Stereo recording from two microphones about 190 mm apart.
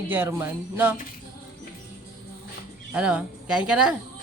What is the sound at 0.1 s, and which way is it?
Speech, 10° right (ahead or behind).